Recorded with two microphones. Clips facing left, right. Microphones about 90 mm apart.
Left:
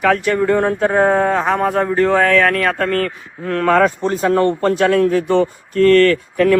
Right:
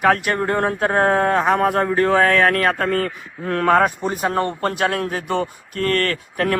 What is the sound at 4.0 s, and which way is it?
Speech, 15° right (ahead or behind).